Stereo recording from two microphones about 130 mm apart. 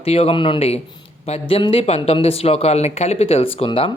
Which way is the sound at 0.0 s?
50° left (ahead or behind).